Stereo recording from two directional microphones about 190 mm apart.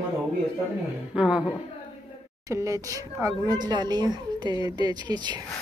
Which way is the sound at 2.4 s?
15° right (ahead or behind).